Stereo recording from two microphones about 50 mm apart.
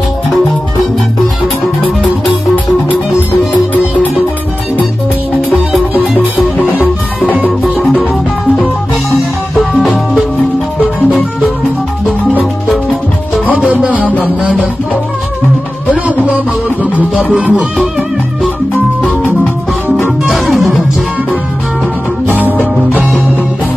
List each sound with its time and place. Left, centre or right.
13.7 s music: right
17.4 s music: right
20.2 s music: centre